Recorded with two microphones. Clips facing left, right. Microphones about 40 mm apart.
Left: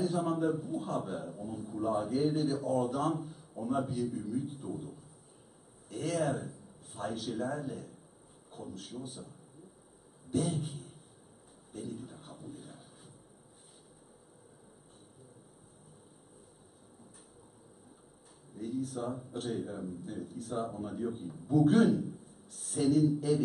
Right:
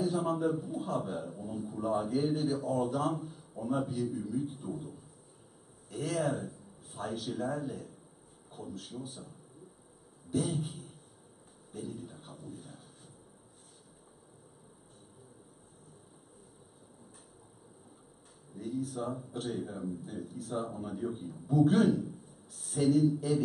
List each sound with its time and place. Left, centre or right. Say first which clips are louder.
0.0 s a man's voice: even; centre
10.3 s a man's voice: even; centre
11.7 s a sound: even; centre
18.5 s a man's voice: even; centre